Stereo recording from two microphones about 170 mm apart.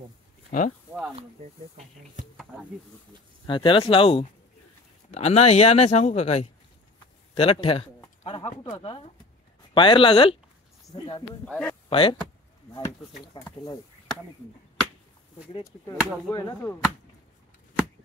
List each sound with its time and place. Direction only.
0.5 s speech: 50° left (ahead or behind)
3.4 s speech: 30° left (ahead or behind)
11.4 s speech: 5° left (ahead or behind)
11.9 s speech: 30° left (ahead or behind)
13.4 s speech: 25° left (ahead or behind)
16.3 s whip: 20° left (ahead or behind)